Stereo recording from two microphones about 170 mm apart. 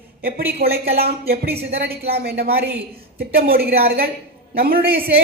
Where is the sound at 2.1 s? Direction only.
65° right (ahead or behind).